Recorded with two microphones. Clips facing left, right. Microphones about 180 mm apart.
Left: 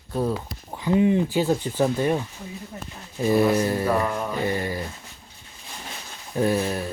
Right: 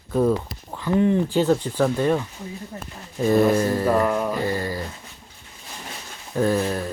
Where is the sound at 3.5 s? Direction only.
15° left (ahead or behind).